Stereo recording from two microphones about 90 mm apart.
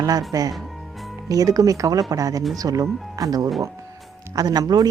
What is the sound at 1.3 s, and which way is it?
A woman's voice, 40° right (ahead or behind).